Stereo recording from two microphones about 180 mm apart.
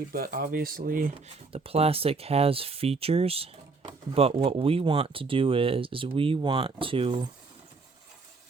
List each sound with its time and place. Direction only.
0.1 s speech: 55° right (ahead or behind)
1.5 s speech: 35° right (ahead or behind)